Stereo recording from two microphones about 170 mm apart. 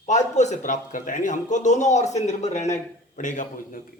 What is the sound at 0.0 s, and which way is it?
A man's voice, 45° left (ahead or behind).